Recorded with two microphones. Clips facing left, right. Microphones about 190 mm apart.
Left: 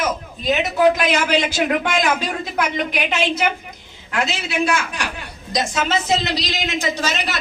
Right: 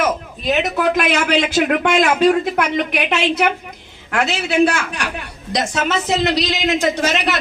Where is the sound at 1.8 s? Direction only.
65° right (ahead or behind).